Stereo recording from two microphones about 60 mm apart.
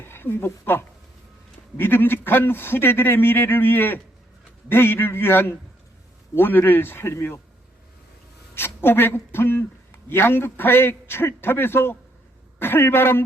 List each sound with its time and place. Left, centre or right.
0.0 s a woman's voice: left
8.5 s a man's voice: left